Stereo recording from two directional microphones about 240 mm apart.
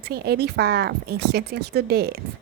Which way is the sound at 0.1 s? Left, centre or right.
Right.